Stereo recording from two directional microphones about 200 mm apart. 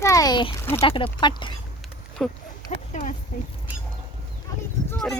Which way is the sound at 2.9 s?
40° left (ahead or behind).